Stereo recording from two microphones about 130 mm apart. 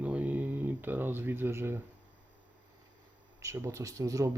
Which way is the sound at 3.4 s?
25° right (ahead or behind).